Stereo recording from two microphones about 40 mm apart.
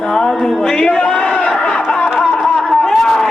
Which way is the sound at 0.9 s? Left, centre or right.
Left.